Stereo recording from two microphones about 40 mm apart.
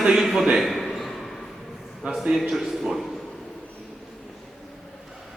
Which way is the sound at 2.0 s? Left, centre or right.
Right.